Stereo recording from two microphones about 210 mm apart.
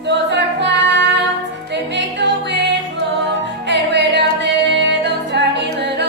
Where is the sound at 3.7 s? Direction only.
55° right (ahead or behind).